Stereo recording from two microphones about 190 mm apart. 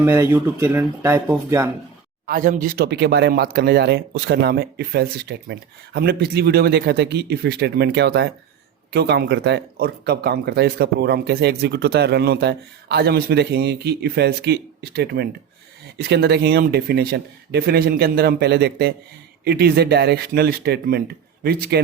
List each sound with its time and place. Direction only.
0.0 s speech: 15° right (ahead or behind)
2.2 s speech: 45° right (ahead or behind)